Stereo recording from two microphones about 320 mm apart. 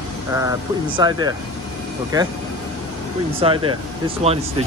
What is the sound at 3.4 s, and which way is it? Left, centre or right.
Speech, centre.